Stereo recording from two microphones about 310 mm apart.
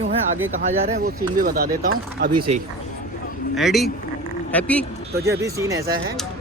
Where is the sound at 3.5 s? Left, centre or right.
Centre.